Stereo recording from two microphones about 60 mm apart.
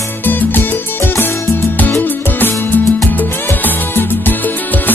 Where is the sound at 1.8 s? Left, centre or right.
Left.